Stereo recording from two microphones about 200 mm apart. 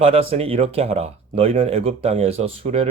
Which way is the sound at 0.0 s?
30° right (ahead or behind).